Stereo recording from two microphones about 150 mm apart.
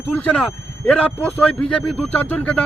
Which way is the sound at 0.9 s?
10° left (ahead or behind).